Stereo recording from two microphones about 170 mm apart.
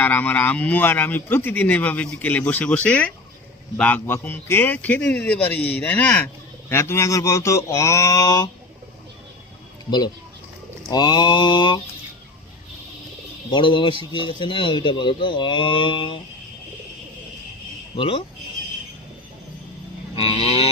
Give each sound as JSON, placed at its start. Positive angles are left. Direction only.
{"t": 0.0, "sound": "speech", "side_deg": 10}
{"t": 10.8, "sound": "speech", "side_deg": 25}
{"t": 13.5, "sound": "speech", "side_deg": 30}
{"t": 17.9, "sound": "speech", "side_deg": 30}
{"t": 20.1, "sound": "livestock", "side_deg": 35}